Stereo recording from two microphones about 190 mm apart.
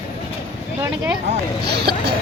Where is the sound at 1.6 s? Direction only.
60° right (ahead or behind).